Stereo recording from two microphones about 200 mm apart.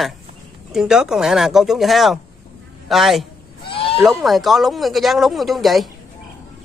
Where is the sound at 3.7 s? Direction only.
25° left (ahead or behind).